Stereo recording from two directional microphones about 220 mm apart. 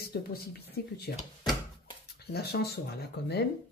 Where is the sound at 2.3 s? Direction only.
45° left (ahead or behind).